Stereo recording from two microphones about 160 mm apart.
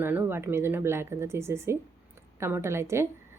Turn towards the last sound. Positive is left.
turn(degrees=-15)  # may be behind; listen again after turning